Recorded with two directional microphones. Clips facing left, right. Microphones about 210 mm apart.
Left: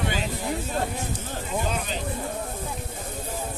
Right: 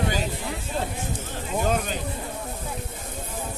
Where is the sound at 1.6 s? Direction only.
50° right (ahead or behind).